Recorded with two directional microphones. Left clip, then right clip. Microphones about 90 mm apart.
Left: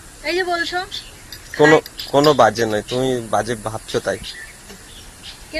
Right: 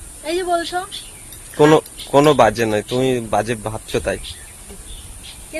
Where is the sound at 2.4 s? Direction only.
90° right.